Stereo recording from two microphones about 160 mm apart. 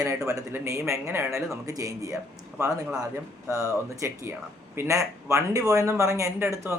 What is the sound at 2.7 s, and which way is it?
Speech, 5° right (ahead or behind).